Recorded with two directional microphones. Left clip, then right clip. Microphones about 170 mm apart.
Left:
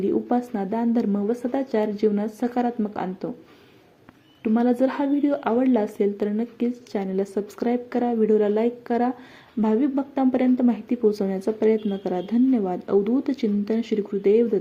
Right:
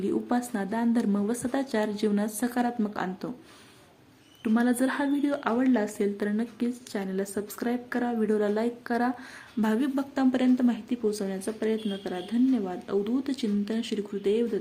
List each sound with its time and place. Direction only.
0.3 s a woman's voice: 10° left (ahead or behind)
4.4 s a woman's voice: 10° left (ahead or behind)